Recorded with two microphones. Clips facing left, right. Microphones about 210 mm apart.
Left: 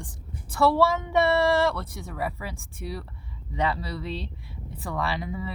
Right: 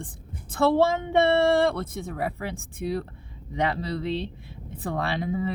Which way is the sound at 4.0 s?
20° right (ahead or behind).